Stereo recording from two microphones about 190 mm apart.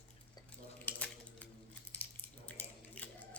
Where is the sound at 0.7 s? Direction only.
10° left (ahead or behind).